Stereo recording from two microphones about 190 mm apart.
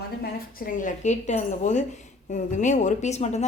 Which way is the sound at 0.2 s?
45° left (ahead or behind).